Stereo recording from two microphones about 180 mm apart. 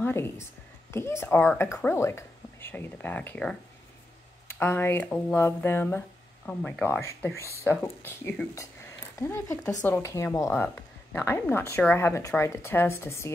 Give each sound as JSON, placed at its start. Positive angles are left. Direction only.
{"t": 0.0, "sound": "a woman's voice", "side_deg": 15}